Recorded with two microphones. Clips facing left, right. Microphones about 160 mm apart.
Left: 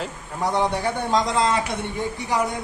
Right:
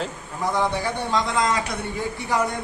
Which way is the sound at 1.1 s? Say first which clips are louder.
Left 2 dB; 35° left (ahead or behind).